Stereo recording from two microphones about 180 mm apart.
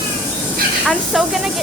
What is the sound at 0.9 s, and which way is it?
Speech, centre (ahead or behind).